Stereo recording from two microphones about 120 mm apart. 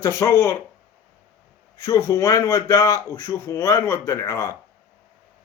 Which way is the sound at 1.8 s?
25° left (ahead or behind).